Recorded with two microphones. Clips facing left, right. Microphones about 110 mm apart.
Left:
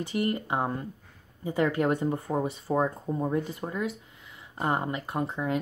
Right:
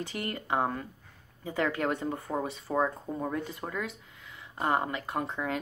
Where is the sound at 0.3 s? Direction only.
20° left (ahead or behind).